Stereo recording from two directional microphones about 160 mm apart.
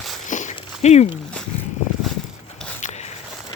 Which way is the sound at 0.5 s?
45° left (ahead or behind).